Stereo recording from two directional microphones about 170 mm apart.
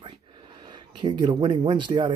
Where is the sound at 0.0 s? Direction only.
25° right (ahead or behind).